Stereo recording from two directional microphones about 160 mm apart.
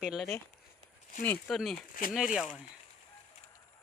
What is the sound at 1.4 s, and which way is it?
Speech, centre (ahead or behind).